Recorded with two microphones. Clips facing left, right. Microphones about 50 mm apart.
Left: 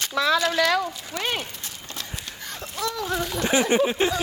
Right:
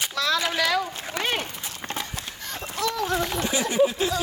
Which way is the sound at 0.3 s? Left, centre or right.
Centre.